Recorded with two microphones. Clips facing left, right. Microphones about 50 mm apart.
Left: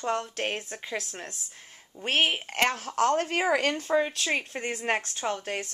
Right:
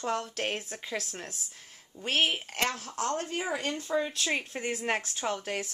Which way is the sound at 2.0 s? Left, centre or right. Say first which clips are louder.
Left 2 dB; left.